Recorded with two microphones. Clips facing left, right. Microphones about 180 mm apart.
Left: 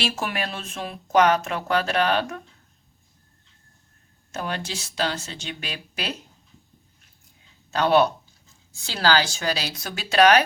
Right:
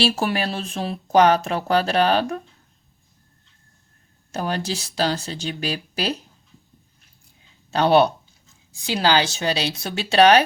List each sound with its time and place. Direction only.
0.0 s speech: 35° right (ahead or behind)
4.3 s speech: 35° right (ahead or behind)
7.7 s speech: 30° right (ahead or behind)
8.7 s speech: 15° right (ahead or behind)